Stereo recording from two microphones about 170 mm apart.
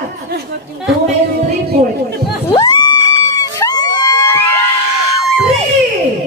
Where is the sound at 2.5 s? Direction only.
25° left (ahead or behind).